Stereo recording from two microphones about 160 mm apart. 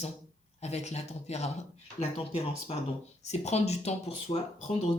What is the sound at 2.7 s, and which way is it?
Speech, 40° left (ahead or behind).